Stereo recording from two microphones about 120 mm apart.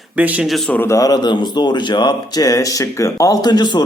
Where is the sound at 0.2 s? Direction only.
10° right (ahead or behind).